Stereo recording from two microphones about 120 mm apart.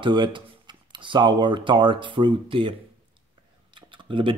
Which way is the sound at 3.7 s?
45° right (ahead or behind).